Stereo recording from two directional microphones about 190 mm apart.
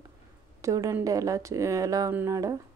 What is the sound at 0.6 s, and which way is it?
Speech, 15° right (ahead or behind).